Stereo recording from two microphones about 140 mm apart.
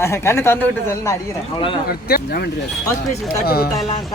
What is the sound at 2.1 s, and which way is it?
Speech, 90° left.